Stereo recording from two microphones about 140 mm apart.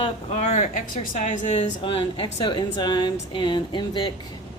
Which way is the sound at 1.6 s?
40° left (ahead or behind).